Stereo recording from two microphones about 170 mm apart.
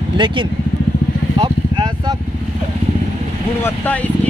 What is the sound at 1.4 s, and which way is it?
Vehicle, 25° right (ahead or behind).